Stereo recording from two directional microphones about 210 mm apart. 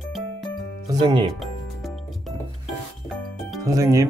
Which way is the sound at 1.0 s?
25° right (ahead or behind).